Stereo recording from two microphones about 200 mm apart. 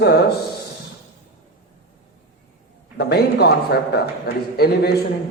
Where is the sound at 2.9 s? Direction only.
55° left (ahead or behind).